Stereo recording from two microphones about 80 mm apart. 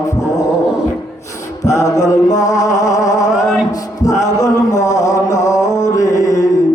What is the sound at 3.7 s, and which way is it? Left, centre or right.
Music, left.